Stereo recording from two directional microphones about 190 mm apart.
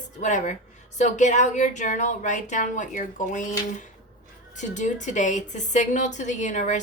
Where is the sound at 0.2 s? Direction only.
40° left (ahead or behind).